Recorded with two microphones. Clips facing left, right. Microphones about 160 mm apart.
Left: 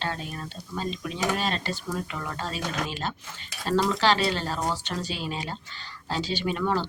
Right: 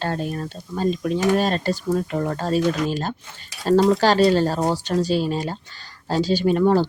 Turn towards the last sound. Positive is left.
turn(degrees=-40)  # may be behind; listen again after turning